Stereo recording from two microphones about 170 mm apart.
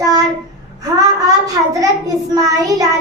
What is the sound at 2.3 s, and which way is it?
Child singing, 20° right (ahead or behind).